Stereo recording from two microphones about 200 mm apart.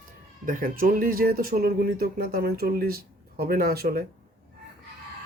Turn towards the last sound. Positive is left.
turn(degrees=-50)  # may be behind; listen again after turning